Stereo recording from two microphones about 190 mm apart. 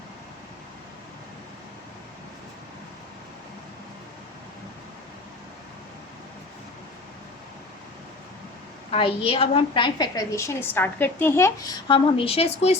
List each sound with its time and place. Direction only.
8.9 s a woman's voice: 30° left (ahead or behind)